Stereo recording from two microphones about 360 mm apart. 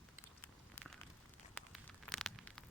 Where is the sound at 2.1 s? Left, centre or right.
Centre.